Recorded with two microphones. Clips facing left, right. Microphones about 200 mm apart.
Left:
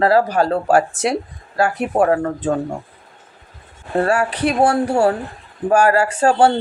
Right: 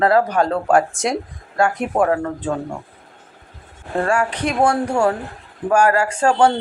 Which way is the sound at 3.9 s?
35° left (ahead or behind).